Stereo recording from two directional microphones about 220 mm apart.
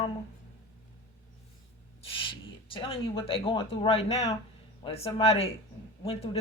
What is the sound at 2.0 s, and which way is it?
Speech, 25° left (ahead or behind).